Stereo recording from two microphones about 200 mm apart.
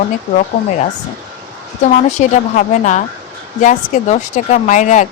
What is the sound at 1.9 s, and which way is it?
Speech, 40° left (ahead or behind).